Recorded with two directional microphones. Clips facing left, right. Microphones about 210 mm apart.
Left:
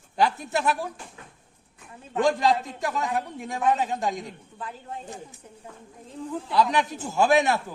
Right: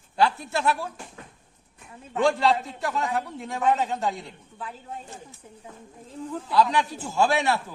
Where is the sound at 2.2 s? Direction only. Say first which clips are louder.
Right 1 dB; 15° left (ahead or behind).